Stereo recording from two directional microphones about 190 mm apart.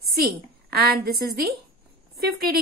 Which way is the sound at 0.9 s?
55° right (ahead or behind).